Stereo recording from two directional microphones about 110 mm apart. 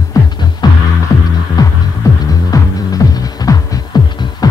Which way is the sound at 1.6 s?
40° left (ahead or behind).